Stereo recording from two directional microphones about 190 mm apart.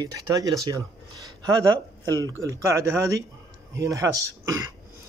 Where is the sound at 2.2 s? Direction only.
15° right (ahead or behind).